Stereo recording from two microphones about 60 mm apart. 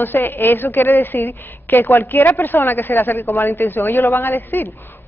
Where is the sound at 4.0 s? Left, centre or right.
Left.